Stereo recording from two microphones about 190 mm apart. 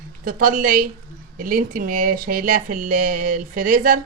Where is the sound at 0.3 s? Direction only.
45° right (ahead or behind).